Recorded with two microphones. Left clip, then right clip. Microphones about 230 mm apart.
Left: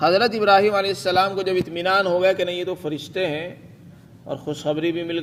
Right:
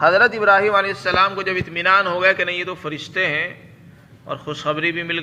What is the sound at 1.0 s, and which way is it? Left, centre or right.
Speech, left.